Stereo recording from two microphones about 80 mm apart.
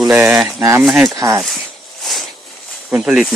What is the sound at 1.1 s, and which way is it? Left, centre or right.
Speech, right.